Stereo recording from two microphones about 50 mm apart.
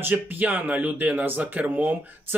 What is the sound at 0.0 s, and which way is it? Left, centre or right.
Speech, right.